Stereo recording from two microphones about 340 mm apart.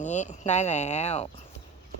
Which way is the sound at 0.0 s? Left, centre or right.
Left.